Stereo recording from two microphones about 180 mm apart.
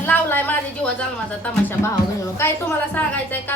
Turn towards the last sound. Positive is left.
turn(degrees=10)  # may be behind; listen again after turning